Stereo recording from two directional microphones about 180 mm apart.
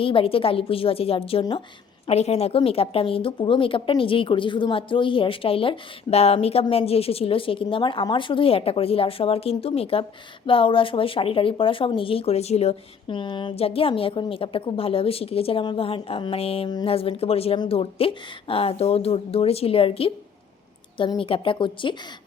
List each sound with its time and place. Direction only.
0.0 s speech: 30° left (ahead or behind)